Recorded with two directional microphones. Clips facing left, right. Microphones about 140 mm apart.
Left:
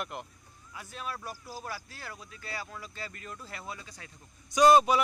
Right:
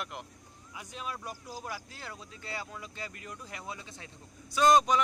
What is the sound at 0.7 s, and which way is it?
Speech, 15° right (ahead or behind).